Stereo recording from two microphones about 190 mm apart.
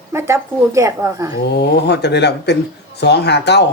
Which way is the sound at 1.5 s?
60° left (ahead or behind).